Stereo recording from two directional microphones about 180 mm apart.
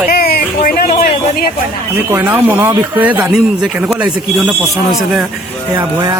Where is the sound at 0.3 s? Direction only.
55° left (ahead or behind).